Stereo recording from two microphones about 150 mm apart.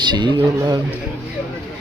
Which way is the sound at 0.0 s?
30° right (ahead or behind).